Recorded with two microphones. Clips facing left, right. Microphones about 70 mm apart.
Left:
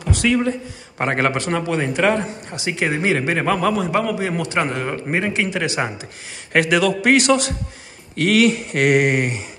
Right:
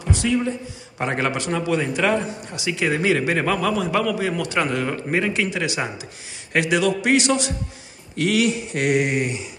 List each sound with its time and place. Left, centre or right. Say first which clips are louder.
0.1 s a man's voice: left 3 dB; left
3.8 s a man's voice: left 1 dB; left
6.5 s speech: left 3 dB; left